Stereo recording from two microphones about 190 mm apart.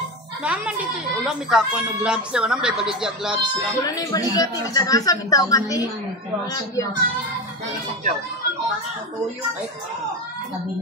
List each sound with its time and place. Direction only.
0.4 s speech: 5° right (ahead or behind)
3.8 s a woman's voice: 20° left (ahead or behind)